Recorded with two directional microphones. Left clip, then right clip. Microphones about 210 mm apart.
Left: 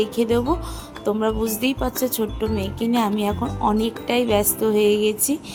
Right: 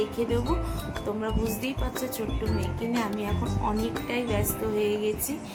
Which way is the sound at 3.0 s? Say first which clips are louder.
Left 10 dB; 45° left (ahead or behind).